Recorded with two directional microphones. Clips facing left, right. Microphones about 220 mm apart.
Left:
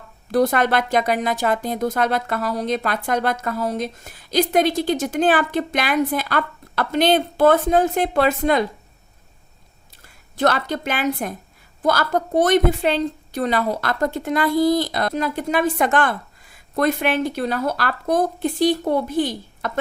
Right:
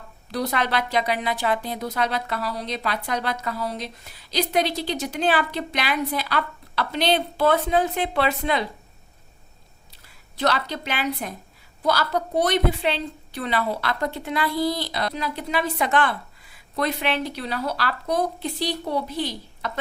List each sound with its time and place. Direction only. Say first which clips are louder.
0.3 s speech: left 7 dB; 50° left (ahead or behind)
10.3 s speech: left 4 dB; 50° left (ahead or behind)